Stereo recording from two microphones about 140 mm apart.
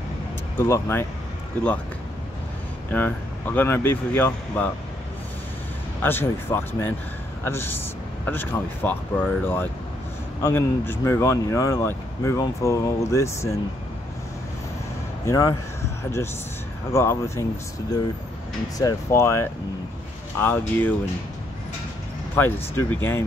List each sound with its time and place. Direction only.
0.6 s speech: 20° left (ahead or behind)
2.9 s speech: 10° left (ahead or behind)
6.0 s speech: 15° left (ahead or behind)
15.2 s speech: 25° left (ahead or behind)
18.8 s speech: 20° left (ahead or behind)
22.3 s speech: 15° left (ahead or behind)